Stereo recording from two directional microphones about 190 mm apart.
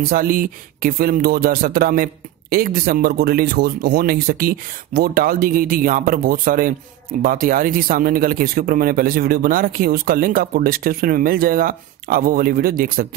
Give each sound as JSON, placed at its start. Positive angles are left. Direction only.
{"t": 0.0, "sound": "speech", "side_deg": -50}